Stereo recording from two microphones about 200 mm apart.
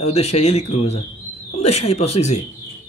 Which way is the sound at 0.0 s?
30° left (ahead or behind).